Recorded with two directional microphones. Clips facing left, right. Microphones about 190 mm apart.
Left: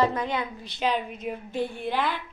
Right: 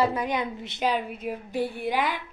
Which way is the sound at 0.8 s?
10° right (ahead or behind).